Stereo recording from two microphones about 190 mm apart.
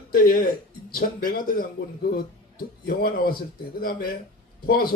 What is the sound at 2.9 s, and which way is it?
Speech, 55° left (ahead or behind).